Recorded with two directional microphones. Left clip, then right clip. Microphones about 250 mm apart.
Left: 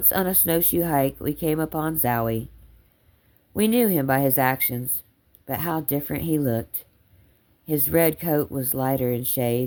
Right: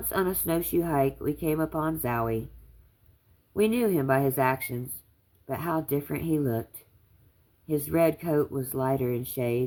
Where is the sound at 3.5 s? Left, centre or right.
Left.